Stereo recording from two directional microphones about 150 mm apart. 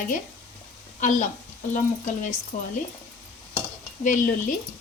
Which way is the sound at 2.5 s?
55° left (ahead or behind).